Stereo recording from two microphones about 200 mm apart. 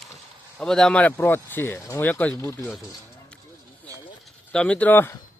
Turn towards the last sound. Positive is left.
turn(degrees=10)  # may be behind; listen again after turning